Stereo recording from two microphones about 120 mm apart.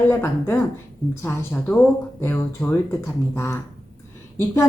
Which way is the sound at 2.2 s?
15° left (ahead or behind).